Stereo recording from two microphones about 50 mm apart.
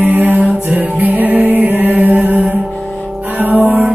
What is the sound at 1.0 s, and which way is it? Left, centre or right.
Music, right.